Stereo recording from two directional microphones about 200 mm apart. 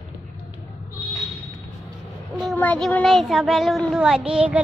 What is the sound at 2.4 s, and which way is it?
Speech, 5° left (ahead or behind).